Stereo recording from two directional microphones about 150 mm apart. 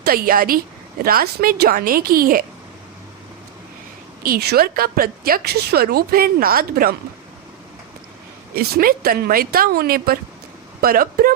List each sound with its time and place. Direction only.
0.0 s a woman's voice: 75° right (ahead or behind)
4.2 s a woman's voice: 85° right
8.5 s a woman's voice: 90° right
10.8 s a woman's voice: 75° right (ahead or behind)